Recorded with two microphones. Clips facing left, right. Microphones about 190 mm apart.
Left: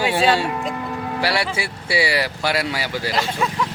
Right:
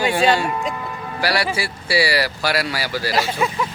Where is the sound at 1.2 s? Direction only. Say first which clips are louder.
Right 2 dB; 25° left (ahead or behind).